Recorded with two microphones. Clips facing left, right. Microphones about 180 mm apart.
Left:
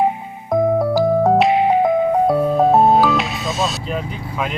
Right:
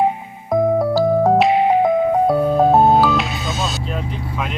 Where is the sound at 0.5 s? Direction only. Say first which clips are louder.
Even; centre (ahead or behind).